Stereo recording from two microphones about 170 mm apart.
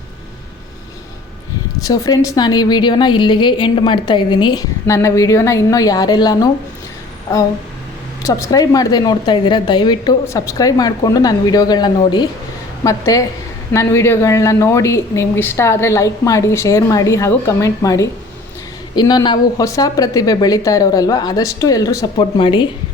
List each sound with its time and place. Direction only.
1.8 s a woman's voice: 20° left (ahead or behind)
8.3 s a woman's voice: 20° left (ahead or behind)